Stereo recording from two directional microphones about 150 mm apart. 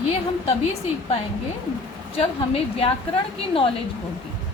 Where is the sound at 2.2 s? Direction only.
40° left (ahead or behind).